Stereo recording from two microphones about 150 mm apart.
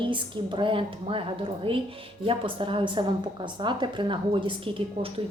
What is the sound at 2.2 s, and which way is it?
A woman's voice, 35° right (ahead or behind).